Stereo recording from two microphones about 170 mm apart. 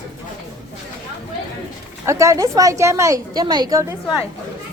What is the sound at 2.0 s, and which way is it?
A woman's voice, 15° right (ahead or behind).